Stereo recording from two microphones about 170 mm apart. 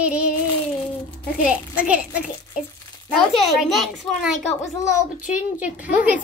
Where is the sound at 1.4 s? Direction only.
5° right (ahead or behind).